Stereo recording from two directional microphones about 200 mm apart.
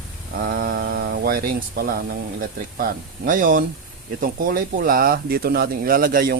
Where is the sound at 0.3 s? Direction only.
45° right (ahead or behind).